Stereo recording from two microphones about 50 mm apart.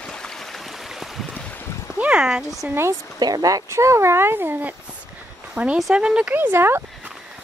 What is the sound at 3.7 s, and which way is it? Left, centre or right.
Speech, right.